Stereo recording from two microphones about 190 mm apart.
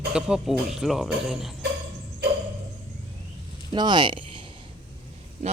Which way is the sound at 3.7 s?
25° right (ahead or behind).